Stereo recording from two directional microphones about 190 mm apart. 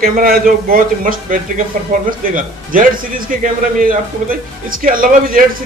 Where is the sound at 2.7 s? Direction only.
45° right (ahead or behind).